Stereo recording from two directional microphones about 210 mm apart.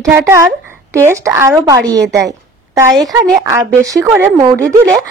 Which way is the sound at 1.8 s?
5° left (ahead or behind).